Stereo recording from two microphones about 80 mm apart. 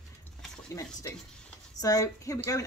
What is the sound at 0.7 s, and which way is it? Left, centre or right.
A woman's voice, left.